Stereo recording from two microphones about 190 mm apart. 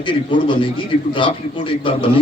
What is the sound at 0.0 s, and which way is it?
A man's voice, 25° left (ahead or behind).